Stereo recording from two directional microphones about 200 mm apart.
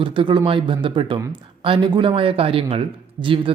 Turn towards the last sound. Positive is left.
turn(degrees=-25)  # may be behind; listen again after turning